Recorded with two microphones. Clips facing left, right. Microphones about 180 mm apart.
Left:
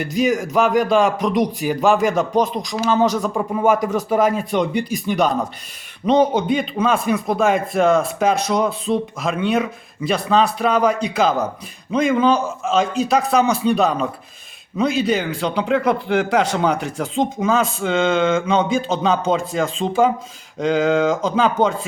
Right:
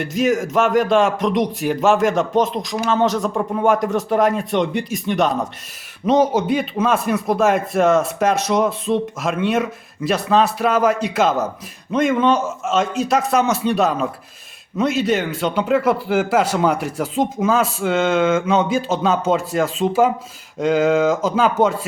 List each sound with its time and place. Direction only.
0.0 s speech: centre (ahead or behind)